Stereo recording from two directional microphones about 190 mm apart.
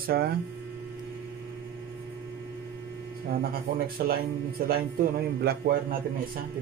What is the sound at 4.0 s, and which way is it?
A man's voice, 55° right (ahead or behind).